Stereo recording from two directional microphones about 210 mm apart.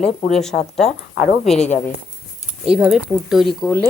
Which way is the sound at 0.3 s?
Centre (ahead or behind).